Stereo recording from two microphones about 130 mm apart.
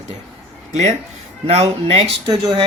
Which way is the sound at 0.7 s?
60° right (ahead or behind).